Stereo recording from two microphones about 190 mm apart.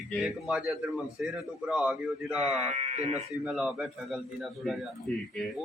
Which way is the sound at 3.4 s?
Centre (ahead or behind).